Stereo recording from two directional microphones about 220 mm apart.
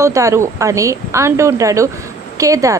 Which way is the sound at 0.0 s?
15° right (ahead or behind).